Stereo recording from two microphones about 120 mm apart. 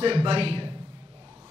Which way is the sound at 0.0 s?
45° right (ahead or behind).